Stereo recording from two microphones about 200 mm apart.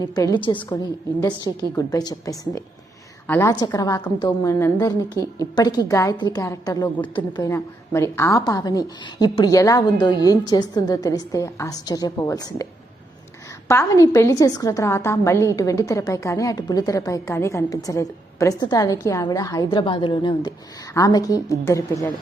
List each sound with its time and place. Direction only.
0.2 s a woman's voice: 20° left (ahead or behind)
13.7 s a woman's voice: 15° left (ahead or behind)